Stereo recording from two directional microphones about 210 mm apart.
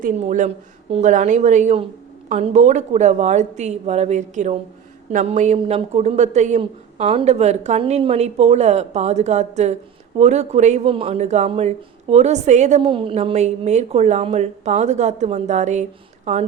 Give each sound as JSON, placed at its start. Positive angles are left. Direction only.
{"t": 0.0, "sound": "speech", "side_deg": -35}